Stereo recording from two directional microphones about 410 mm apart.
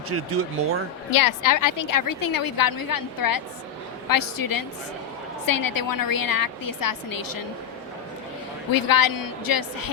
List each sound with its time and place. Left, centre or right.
0.1 s speech: right
1.1 s a woman's voice: left
8.7 s a woman's voice: left